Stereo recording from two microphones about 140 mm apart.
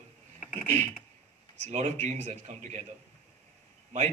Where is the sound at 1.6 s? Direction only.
55° right (ahead or behind).